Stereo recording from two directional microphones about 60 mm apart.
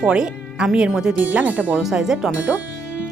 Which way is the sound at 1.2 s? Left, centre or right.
Right.